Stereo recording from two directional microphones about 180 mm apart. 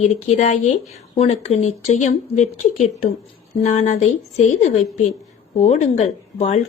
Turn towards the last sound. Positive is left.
turn(degrees=40)  # may be behind; listen again after turning